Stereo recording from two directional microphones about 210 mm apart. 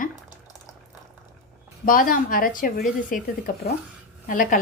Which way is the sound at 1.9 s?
40° left (ahead or behind).